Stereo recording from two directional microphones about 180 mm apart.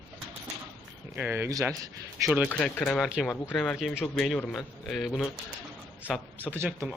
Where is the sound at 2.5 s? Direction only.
5° left (ahead or behind).